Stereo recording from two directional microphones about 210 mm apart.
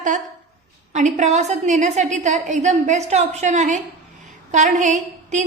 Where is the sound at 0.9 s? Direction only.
35° right (ahead or behind).